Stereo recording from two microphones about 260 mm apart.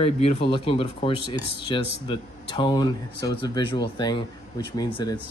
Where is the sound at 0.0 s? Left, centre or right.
Left.